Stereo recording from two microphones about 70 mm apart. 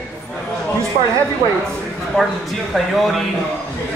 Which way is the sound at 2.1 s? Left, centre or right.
Centre.